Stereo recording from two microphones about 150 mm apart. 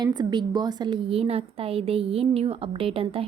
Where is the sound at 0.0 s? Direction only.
30° right (ahead or behind).